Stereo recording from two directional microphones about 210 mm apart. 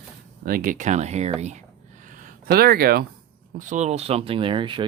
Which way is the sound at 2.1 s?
40° right (ahead or behind).